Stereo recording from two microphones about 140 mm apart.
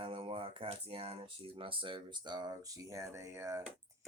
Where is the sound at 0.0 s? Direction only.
40° right (ahead or behind).